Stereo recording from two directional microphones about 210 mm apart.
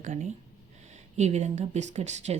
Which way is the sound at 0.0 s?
35° right (ahead or behind).